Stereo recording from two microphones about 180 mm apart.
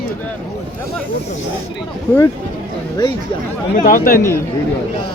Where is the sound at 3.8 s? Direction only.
55° left (ahead or behind).